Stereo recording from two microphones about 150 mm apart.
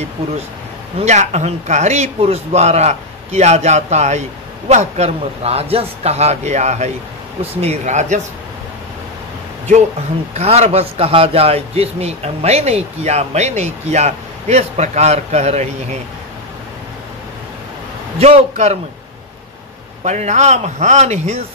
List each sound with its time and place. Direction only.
0.9 s a man's voice: 50° right (ahead or behind)
10.3 s a man's voice: 45° right (ahead or behind)
18.2 s a man's voice: 45° right (ahead or behind)
20.0 s a man's voice: 50° right (ahead or behind)